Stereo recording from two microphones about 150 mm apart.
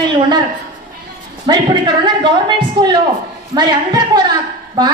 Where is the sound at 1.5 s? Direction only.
30° right (ahead or behind).